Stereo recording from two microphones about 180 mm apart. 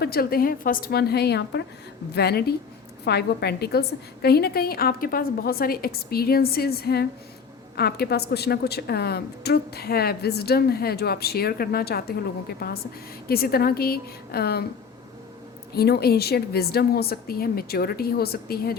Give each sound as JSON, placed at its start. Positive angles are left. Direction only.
{"t": 0.0, "sound": "a woman's voice", "side_deg": 60}
{"t": 15.7, "sound": "a woman's voice", "side_deg": 60}